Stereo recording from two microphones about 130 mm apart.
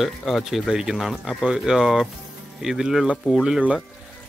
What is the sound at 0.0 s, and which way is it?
Speech, centre (ahead or behind).